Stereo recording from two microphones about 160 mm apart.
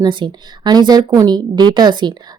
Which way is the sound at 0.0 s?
30° right (ahead or behind).